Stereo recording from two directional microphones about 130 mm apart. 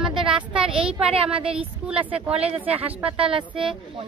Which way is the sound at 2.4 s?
50° right (ahead or behind).